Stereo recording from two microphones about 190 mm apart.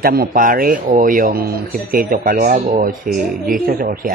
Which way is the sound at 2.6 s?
35° right (ahead or behind).